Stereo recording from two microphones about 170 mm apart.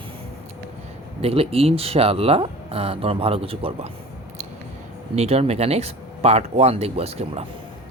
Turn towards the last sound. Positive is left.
turn(degrees=-35)  # may be behind; listen again after turning